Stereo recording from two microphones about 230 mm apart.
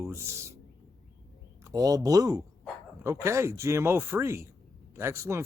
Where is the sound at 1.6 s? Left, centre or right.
Centre.